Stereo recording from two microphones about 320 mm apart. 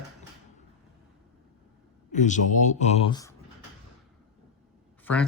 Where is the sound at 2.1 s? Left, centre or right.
Left.